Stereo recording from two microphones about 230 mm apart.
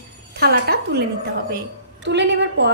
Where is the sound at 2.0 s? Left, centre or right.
Right.